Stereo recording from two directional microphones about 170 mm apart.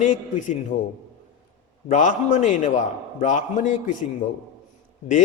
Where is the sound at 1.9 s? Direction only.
45° left (ahead or behind).